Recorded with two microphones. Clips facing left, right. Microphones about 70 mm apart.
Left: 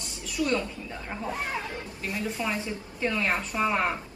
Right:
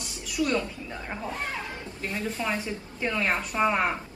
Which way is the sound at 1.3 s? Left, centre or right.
Centre.